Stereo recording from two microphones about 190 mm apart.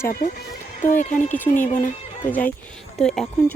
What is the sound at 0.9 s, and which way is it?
Speech, 40° left (ahead or behind).